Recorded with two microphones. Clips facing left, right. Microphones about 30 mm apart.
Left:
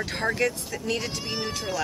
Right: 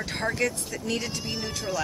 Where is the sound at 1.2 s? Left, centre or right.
Left.